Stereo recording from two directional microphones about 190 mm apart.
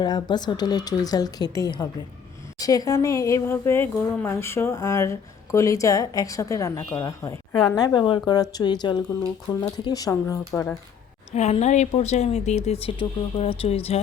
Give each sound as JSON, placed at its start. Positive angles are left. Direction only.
{"t": 0.0, "sound": "speech", "side_deg": 20}
{"t": 11.3, "sound": "speech", "side_deg": 35}